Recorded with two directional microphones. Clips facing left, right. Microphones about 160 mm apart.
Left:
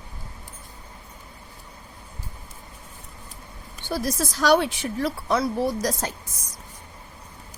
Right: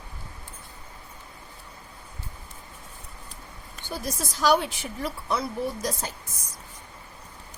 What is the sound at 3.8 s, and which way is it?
Speech, 80° left.